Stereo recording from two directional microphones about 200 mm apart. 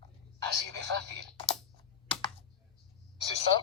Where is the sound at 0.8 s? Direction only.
60° right (ahead or behind).